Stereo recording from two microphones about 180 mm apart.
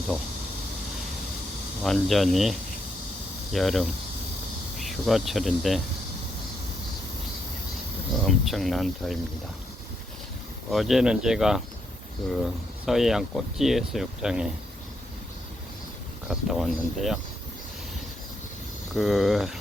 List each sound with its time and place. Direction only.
1.8 s speech: centre (ahead or behind)
8.2 s speech: centre (ahead or behind)
10.7 s speech: centre (ahead or behind)
16.3 s speech: centre (ahead or behind)
18.9 s speech: centre (ahead or behind)